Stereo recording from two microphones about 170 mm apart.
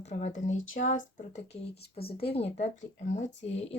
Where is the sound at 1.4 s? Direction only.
70° left (ahead or behind).